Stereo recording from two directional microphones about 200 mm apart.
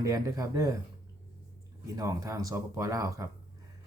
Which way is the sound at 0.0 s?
15° right (ahead or behind).